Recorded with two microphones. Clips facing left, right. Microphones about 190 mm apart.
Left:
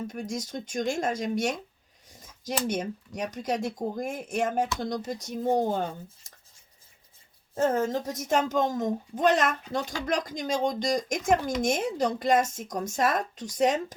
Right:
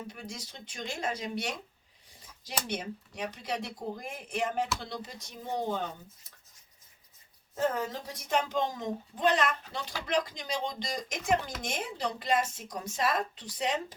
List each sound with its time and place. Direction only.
0.1 s speech: 45° left (ahead or behind)
6.3 s writing: 45° left (ahead or behind)
7.5 s speech: 45° left (ahead or behind)